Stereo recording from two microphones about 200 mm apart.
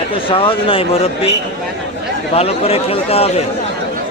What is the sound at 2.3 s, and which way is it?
Speech, 30° left (ahead or behind).